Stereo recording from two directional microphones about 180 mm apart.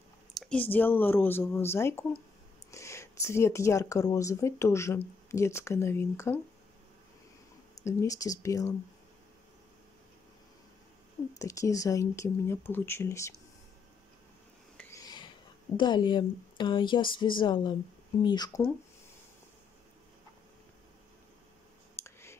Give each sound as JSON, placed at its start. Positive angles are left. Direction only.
{"t": 0.3, "sound": "speech", "side_deg": 5}
{"t": 7.8, "sound": "speech", "side_deg": 15}
{"t": 11.3, "sound": "speech", "side_deg": 15}
{"t": 14.8, "sound": "a sound", "side_deg": 15}
{"t": 17.2, "sound": "speech", "side_deg": 25}
{"t": 21.9, "sound": "clicking", "side_deg": 15}